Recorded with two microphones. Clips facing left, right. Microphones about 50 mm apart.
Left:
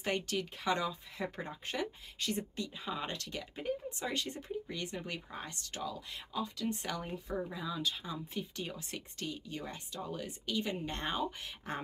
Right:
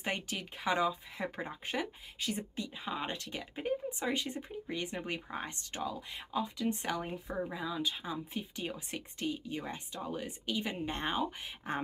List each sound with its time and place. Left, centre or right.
0.0 s speech: centre